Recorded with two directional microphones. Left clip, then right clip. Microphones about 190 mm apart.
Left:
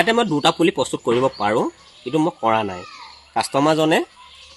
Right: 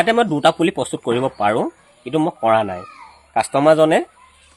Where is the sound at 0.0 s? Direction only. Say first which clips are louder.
Right 2 dB; 35° right (ahead or behind).